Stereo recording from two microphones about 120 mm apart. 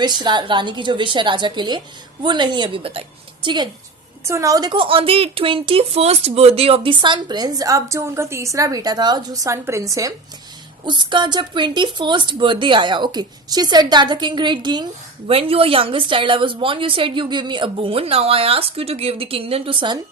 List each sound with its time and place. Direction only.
0.0 s a woman's voice: 35° right (ahead or behind)
4.2 s a woman's voice: 25° right (ahead or behind)
10.8 s a woman's voice: 40° right (ahead or behind)
15.3 s a woman's voice: 50° right (ahead or behind)